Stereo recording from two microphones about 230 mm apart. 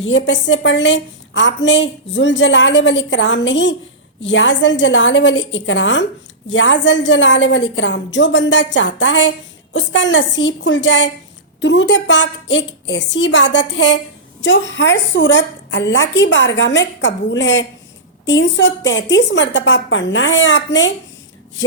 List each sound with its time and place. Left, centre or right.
0.0 s a woman's voice: left